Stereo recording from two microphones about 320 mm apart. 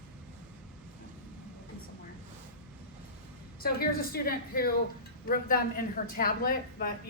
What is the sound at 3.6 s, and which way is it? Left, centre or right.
A woman's voice, left.